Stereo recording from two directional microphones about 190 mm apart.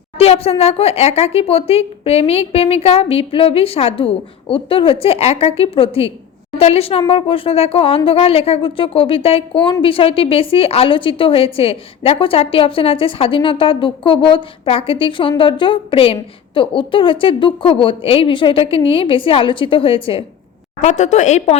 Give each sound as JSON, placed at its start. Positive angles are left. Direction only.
{"t": 0.2, "sound": "speech", "side_deg": 30}